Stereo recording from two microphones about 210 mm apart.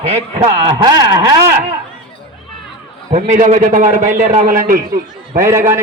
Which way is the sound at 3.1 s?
35° right (ahead or behind).